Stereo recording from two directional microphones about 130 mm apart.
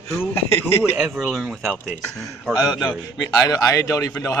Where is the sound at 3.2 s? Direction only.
25° left (ahead or behind).